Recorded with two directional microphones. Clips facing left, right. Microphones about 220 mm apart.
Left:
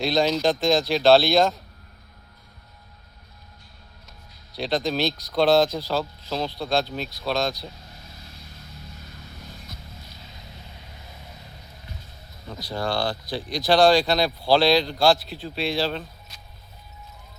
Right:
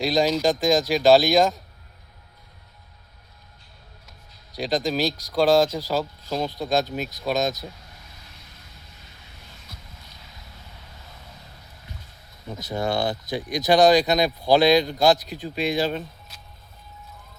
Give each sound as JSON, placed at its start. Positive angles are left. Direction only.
{"t": 0.0, "sound": "speech", "side_deg": -10}
{"t": 4.7, "sound": "speech", "side_deg": -10}
{"t": 12.5, "sound": "speech", "side_deg": -20}